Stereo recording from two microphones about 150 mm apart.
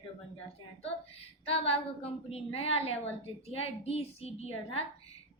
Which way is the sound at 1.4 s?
40° left (ahead or behind).